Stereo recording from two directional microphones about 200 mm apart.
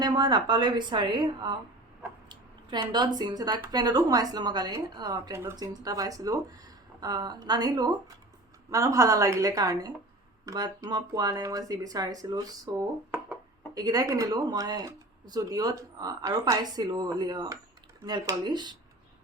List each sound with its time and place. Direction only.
0.0 s speech: 20° right (ahead or behind)